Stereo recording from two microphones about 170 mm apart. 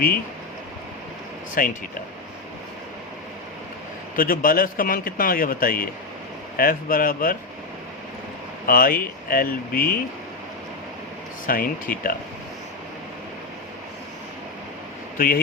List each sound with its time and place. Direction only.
1.6 s speech: 55° left (ahead or behind)
4.1 s speech: 55° left (ahead or behind)
8.6 s speech: 60° left (ahead or behind)
11.4 s speech: 55° left (ahead or behind)